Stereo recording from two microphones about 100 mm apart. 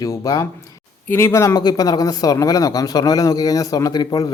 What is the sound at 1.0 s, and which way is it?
Speech, 25° left (ahead or behind).